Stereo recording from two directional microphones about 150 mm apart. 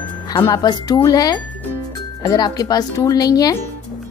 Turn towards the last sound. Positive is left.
turn(degrees=25)  # may be behind; listen again after turning